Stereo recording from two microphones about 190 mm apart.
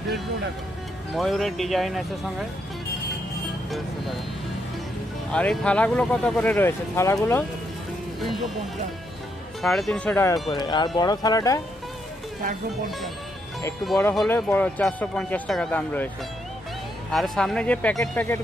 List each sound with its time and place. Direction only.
1.1 s speech: centre (ahead or behind)
5.3 s speech: 5° left (ahead or behind)
9.6 s speech: centre (ahead or behind); by 11.6 s 20° left (ahead or behind)
14.1 s speech: 5° left (ahead or behind)
17.1 s speech: centre (ahead or behind)